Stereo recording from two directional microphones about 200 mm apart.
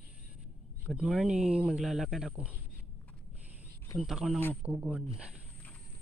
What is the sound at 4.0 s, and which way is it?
Speech, centre (ahead or behind).